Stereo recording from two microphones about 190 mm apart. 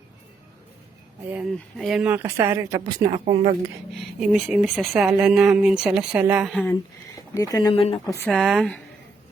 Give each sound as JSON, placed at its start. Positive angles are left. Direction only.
{"t": 1.2, "sound": "speech", "side_deg": -10}
{"t": 1.5, "sound": "speech", "side_deg": 0}
{"t": 4.2, "sound": "speech", "side_deg": 0}
{"t": 7.3, "sound": "speech", "side_deg": 20}
{"t": 8.3, "sound": "speech", "side_deg": 0}